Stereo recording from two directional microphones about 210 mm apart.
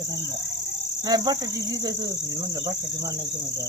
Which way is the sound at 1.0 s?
20° right (ahead or behind).